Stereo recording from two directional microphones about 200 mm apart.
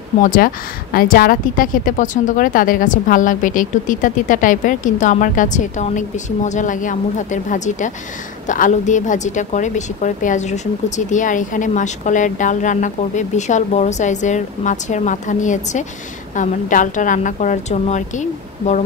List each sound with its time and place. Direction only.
0.2 s a woman's voice: 45° left (ahead or behind)